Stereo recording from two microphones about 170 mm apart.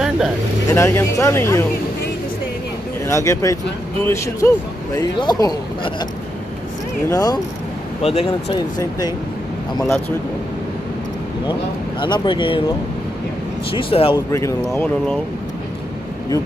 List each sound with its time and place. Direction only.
0.7 s speech: 15° left (ahead or behind)
3.1 s speech: 20° left (ahead or behind)
7.1 s speech: 20° left (ahead or behind)
8.0 s speech: 35° left (ahead or behind)
8.5 s speech: 25° left (ahead or behind)
12.0 s speech: 30° left (ahead or behind)
13.7 s speech: 30° left (ahead or behind)
14.3 s speech: 15° left (ahead or behind)